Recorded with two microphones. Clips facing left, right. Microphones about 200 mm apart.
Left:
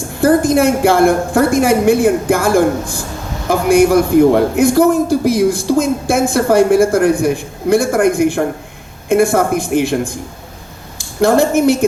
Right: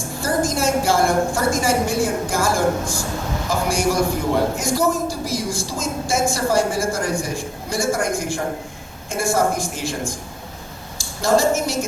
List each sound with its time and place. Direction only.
0.2 s a man's voice: 60° left (ahead or behind)